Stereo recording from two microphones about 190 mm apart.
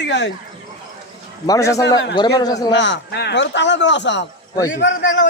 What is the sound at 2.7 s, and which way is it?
Speech, 70° left (ahead or behind).